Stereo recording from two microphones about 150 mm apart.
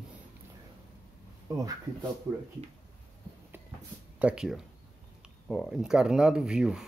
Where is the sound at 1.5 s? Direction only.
25° right (ahead or behind).